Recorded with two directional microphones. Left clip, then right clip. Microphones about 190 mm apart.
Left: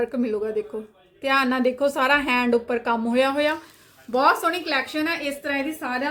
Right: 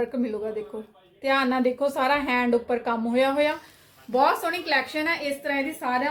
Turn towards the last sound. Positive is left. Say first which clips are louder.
# right 1 dB
turn(degrees=30)  # may be behind; listen again after turning